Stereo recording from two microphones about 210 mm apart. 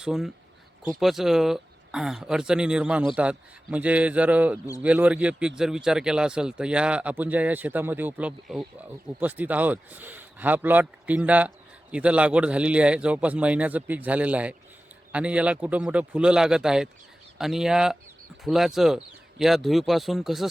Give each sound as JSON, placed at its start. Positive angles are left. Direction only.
{"t": 0.0, "sound": "a man's voice", "side_deg": 0}